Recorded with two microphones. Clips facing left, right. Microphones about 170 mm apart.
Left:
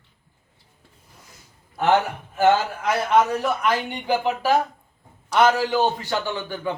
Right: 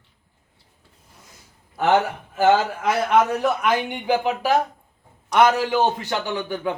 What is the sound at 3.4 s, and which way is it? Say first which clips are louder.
A man's voice: right 2 dB; 15° right (ahead or behind).